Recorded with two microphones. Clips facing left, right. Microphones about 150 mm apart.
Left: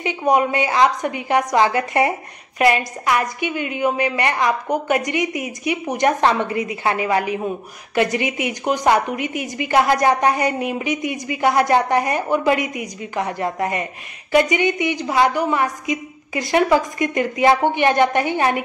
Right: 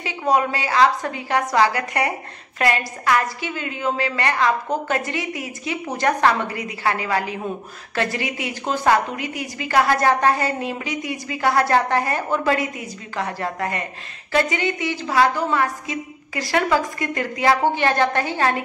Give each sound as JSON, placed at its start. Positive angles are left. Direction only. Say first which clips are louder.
{"t": 0.0, "sound": "a woman's voice", "louder": "left 3 dB", "side_deg": 20}